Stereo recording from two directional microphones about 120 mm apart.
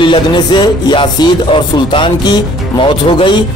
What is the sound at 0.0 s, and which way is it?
Music, 40° left (ahead or behind).